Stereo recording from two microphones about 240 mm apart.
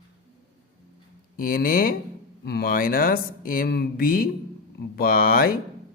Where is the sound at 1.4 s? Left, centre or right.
Left.